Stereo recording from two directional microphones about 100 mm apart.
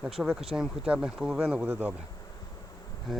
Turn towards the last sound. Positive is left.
turn(degrees=0)  # may be behind; listen again after turning